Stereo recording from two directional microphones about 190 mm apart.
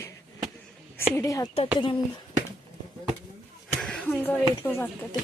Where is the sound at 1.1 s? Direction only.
15° left (ahead or behind).